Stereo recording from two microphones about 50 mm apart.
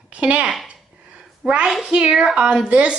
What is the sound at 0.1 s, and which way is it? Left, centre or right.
A child's voice, right.